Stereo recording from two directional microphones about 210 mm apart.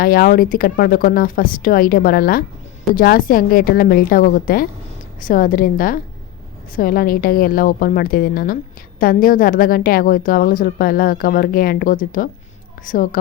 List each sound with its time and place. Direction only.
0.0 s a woman's voice: 45° left (ahead or behind)